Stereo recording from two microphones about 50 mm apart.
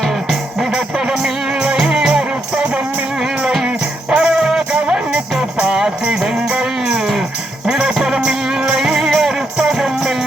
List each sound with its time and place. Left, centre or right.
0.6 s music: centre